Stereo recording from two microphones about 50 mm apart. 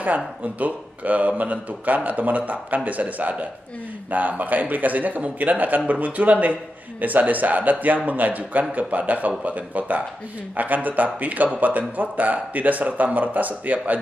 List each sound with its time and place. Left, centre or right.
0.0 s speech: right